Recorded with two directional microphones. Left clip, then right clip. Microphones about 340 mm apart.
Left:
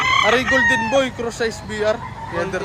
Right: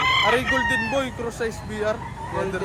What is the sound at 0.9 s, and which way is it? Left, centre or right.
Speech, left.